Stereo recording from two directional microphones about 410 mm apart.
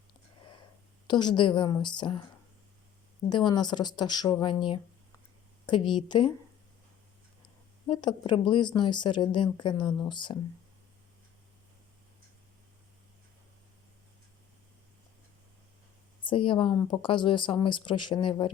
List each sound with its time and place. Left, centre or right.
1.0 s a woman's voice: centre
3.2 s a woman's voice: centre
7.9 s a woman's voice: centre
16.2 s a woman's voice: centre